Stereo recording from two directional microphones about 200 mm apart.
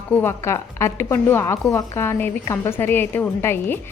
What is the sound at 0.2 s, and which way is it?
A woman's voice, 10° left (ahead or behind).